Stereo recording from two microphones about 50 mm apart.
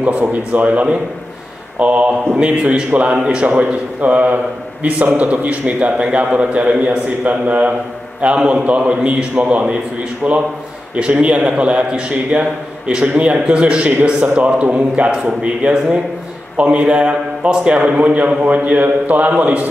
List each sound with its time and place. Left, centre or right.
0.3 s a man's voice: right
3.4 s a man's voice: right